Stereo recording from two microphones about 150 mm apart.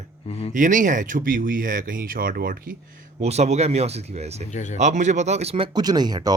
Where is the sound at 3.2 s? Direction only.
45° right (ahead or behind).